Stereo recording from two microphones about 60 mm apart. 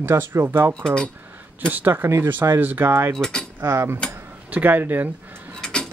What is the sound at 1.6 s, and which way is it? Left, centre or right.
Speech, right.